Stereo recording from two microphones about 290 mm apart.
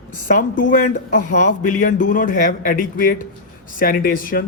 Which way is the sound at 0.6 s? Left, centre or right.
Left.